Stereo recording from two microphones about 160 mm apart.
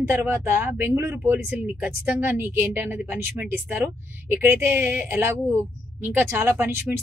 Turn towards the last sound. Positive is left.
turn(degrees=-15)  # may be behind; listen again after turning